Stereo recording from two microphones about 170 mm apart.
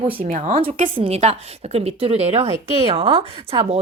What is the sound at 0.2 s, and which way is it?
Speech, 50° right (ahead or behind).